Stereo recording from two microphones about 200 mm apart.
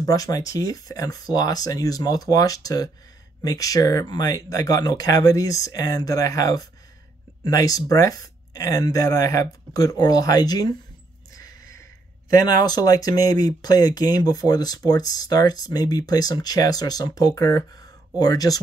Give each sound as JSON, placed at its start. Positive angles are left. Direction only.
{"t": 0.0, "sound": "speech", "side_deg": 15}
{"t": 11.3, "sound": "a sound", "side_deg": 15}
{"t": 12.4, "sound": "speech", "side_deg": 20}